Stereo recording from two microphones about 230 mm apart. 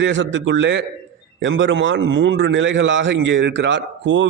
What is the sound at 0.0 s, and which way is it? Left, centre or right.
A man's voice, right.